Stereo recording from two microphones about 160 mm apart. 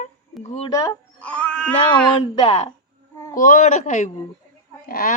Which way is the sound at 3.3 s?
55° left (ahead or behind).